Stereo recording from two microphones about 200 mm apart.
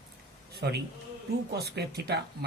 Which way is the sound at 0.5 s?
55° right (ahead or behind).